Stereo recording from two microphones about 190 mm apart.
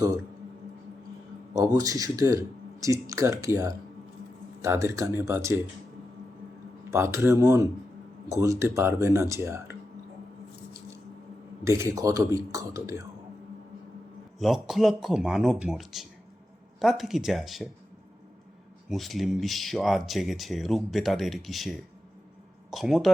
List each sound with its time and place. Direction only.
1.5 s speech: 20° right (ahead or behind)
6.9 s speech: 15° right (ahead or behind)
11.6 s speech: 15° right (ahead or behind)
14.3 s speech: centre (ahead or behind)
18.9 s speech: centre (ahead or behind)